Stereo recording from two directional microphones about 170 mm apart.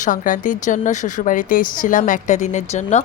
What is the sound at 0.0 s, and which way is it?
Speech, 50° left (ahead or behind).